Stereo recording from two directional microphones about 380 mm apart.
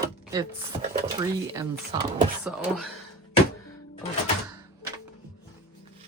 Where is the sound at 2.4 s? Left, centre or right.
Centre.